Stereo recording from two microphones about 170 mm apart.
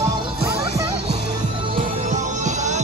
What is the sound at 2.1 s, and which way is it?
Music, 45° right (ahead or behind).